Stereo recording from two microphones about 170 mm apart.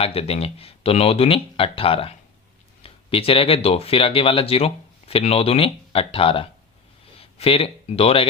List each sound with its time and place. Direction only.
0.0 s speech: 35° left (ahead or behind)